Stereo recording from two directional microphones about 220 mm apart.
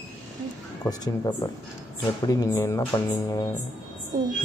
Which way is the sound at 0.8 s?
15° left (ahead or behind).